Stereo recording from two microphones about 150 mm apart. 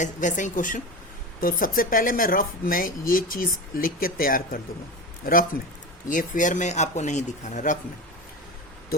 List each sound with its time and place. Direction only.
0.0 s a woman's voice: 55° left (ahead or behind)